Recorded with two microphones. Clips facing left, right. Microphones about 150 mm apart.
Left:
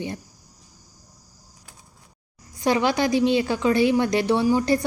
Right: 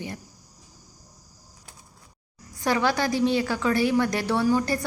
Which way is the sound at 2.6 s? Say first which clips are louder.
Left 3 dB; 20° left (ahead or behind).